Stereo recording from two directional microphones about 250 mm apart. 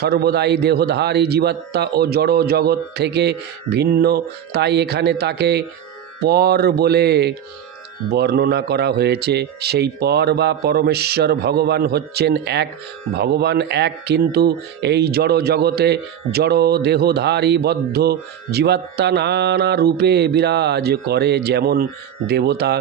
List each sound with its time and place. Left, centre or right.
0.0 s speech: right